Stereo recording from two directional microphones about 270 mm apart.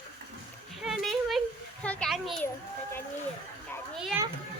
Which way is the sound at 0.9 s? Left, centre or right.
Centre.